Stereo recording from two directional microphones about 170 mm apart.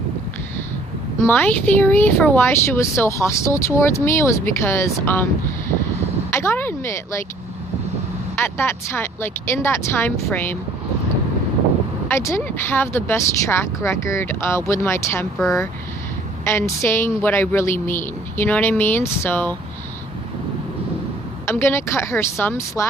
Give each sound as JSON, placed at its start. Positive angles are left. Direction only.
{"t": 1.2, "sound": "speech", "side_deg": 10}
{"t": 6.3, "sound": "speech", "side_deg": 15}
{"t": 8.4, "sound": "speech", "side_deg": 15}
{"t": 12.0, "sound": "speech", "side_deg": 15}
{"t": 16.4, "sound": "speech", "side_deg": 15}
{"t": 21.4, "sound": "speech", "side_deg": 15}